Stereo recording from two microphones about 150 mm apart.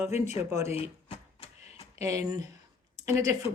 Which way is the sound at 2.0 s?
20° right (ahead or behind).